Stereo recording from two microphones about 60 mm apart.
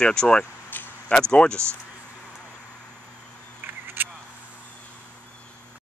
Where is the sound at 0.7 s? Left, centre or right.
Left.